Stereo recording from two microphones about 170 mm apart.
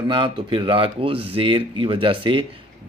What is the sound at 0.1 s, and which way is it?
Speech, 30° right (ahead or behind).